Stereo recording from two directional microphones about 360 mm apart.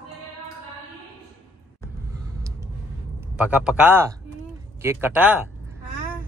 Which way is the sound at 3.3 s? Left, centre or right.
Centre.